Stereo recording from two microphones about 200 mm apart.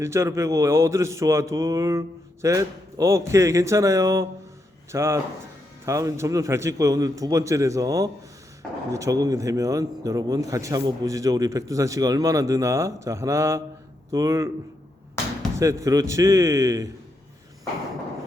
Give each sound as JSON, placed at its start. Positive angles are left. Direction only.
{"t": 0.0, "sound": "a man's voice", "side_deg": -15}
{"t": 15.5, "sound": "a man's voice", "side_deg": -15}